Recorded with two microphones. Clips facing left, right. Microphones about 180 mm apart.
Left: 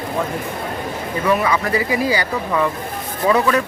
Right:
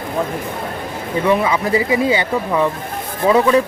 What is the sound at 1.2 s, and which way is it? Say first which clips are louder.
Speech: right 2 dB; 25° right (ahead or behind).